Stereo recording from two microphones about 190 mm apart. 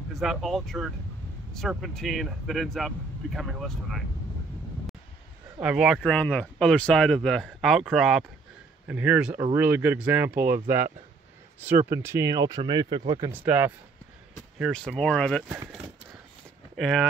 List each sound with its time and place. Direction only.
0.1 s speech: centre (ahead or behind)
5.6 s speech: 5° right (ahead or behind); by 13.3 s 25° right (ahead or behind)
13.3 s speech: 10° right (ahead or behind)
14.6 s speech: centre (ahead or behind)
16.7 s speech: centre (ahead or behind)